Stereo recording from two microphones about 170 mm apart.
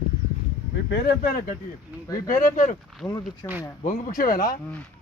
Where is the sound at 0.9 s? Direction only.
60° left (ahead or behind).